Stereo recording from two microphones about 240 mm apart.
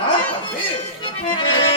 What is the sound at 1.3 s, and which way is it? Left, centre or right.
Accordion, left.